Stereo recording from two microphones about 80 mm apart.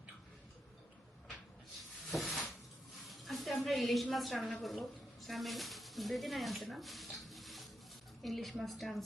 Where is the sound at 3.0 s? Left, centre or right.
Centre.